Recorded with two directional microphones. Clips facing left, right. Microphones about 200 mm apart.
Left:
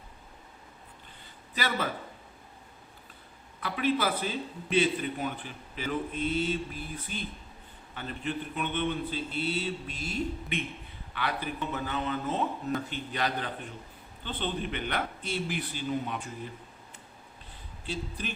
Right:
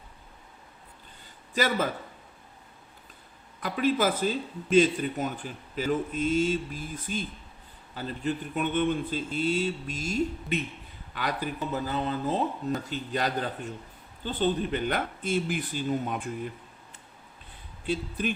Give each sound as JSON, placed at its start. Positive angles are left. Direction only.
{"t": 1.5, "sound": "a man's voice", "side_deg": -45}
{"t": 3.6, "sound": "a man's voice", "side_deg": -40}
{"t": 17.8, "sound": "a man's voice", "side_deg": -55}